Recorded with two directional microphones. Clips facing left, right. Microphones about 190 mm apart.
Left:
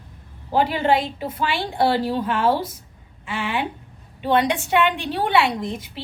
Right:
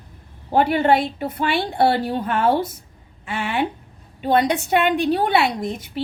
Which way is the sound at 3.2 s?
45° right (ahead or behind).